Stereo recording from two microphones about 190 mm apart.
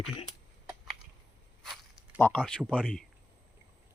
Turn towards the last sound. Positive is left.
turn(degrees=-5)  # may be behind; listen again after turning